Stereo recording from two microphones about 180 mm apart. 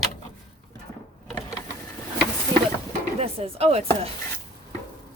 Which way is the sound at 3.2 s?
35° right (ahead or behind).